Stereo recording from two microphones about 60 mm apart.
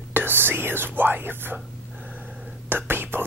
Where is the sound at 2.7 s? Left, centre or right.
Right.